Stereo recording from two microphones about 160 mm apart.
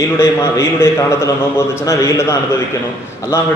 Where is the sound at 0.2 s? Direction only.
15° left (ahead or behind).